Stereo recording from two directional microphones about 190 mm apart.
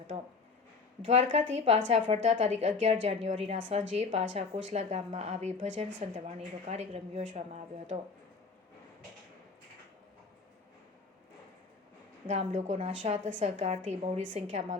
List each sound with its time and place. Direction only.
1.0 s a woman's voice: 35° right (ahead or behind)
12.3 s a woman's voice: 35° right (ahead or behind)